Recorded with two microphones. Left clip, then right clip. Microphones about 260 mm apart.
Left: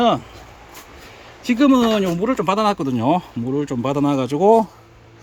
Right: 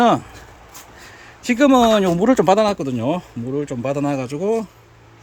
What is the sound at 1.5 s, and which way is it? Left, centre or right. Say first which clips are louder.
Speech: right 3 dB; centre.